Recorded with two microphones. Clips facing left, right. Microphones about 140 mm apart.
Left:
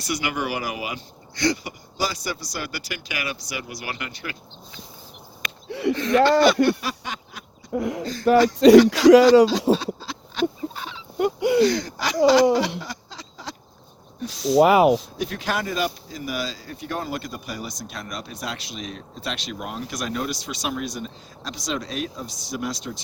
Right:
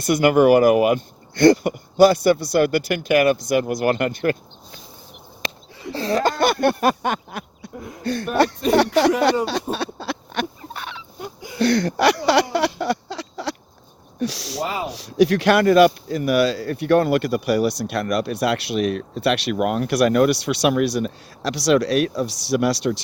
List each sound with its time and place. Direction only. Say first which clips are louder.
0.0 s speech: right 12 dB; 50° right (ahead or behind)
5.6 s a sound: left 12 dB; 75° left (ahead or behind)
5.9 s speech: left 2 dB; 35° right (ahead or behind)
6.4 s speech: even; 55° right (ahead or behind)
7.8 s speech: left 11 dB; 85° left
8.0 s speech: right 2 dB; 65° right (ahead or behind)
8.5 s speech: left 8 dB; 80° left
9.7 s a sound: right 1 dB; 65° right (ahead or behind)
11.2 s speech: left 17 dB; 75° left (ahead or behind)
11.6 s speech: right 4 dB; 65° right (ahead or behind)
12.8 s a sound: right 13 dB; 70° right (ahead or behind)
14.2 s speech: right 1 dB; 75° right (ahead or behind)
14.6 s speech: left 11 dB; 70° left (ahead or behind)
14.9 s speech: right 10 dB; 80° right